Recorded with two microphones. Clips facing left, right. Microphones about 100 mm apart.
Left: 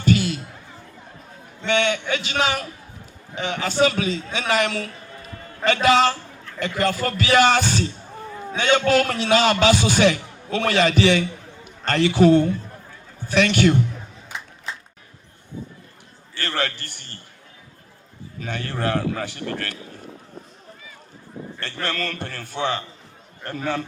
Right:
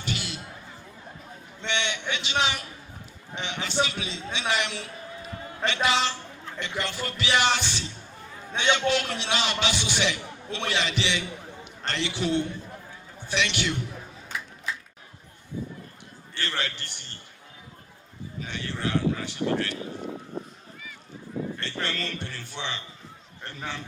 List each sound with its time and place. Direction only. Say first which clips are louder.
0.0 s a sound: left 14 dB; 45° left (ahead or behind)
1.6 s a man's voice: left 8 dB; 45° left (ahead or behind)
14.3 s crowd: even; 25° left (ahead or behind)
16.3 s a man's voice: left 5 dB; 50° left (ahead or behind)
18.3 s a man's voice: left 6 dB; 50° left (ahead or behind)
21.6 s a man's voice: left 4 dB; 50° left (ahead or behind)